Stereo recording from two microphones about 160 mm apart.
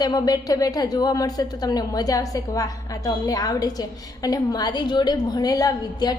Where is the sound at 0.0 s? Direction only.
25° left (ahead or behind).